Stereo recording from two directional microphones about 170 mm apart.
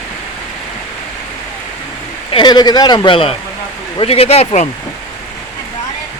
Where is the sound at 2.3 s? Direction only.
30° left (ahead or behind).